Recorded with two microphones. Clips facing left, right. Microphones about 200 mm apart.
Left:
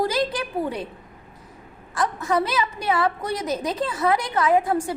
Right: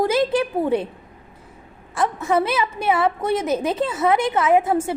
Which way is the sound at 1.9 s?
25° right (ahead or behind).